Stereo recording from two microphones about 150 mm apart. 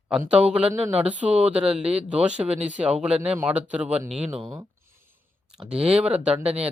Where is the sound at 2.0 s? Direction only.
10° right (ahead or behind).